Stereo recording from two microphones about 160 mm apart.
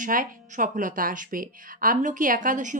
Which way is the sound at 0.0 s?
55° right (ahead or behind).